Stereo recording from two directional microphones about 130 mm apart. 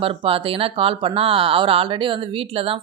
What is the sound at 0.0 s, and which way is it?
Speech, 45° right (ahead or behind).